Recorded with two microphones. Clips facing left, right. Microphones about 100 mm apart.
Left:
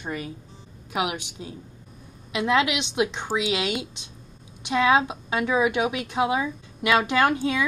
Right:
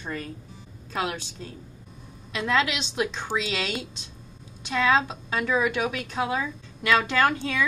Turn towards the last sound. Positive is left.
turn(degrees=20)  # may be behind; listen again after turning